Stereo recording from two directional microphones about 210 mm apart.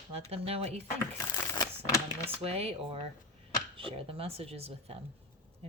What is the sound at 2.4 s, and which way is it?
Speech, 30° right (ahead or behind).